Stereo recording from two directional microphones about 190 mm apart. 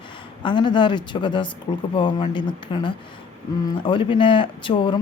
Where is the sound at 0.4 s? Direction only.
25° left (ahead or behind).